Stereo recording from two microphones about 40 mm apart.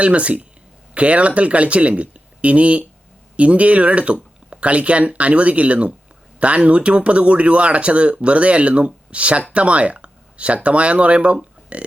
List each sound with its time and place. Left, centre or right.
0.0 s speech: right